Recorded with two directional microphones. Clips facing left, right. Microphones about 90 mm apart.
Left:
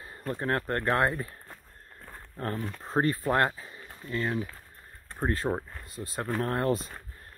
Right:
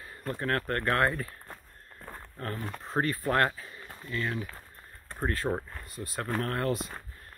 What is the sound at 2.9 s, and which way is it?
Speech, 30° left (ahead or behind).